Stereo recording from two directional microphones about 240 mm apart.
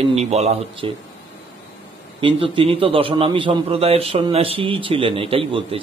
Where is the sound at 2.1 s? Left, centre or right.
Right.